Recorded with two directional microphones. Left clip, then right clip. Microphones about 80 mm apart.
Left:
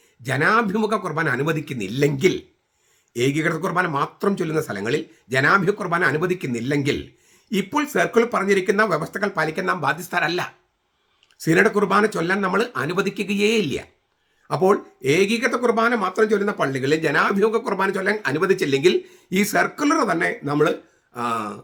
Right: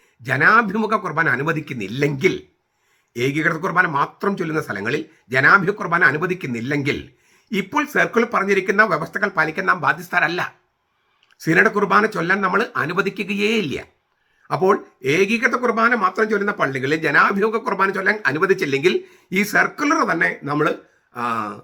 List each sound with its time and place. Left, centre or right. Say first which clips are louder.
0.2 s speech: right 4 dB; left